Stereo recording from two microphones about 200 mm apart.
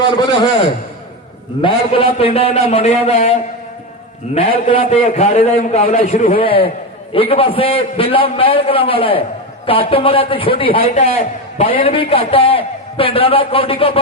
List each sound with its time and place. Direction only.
1.6 s a man's voice: 30° left (ahead or behind)
4.4 s a man's voice: 30° left (ahead or behind)